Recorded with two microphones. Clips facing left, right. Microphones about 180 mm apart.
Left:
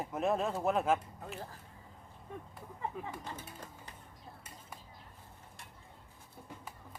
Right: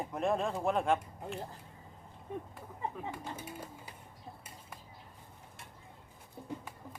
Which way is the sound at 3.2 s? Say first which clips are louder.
Right 3 dB; 10° right (ahead or behind).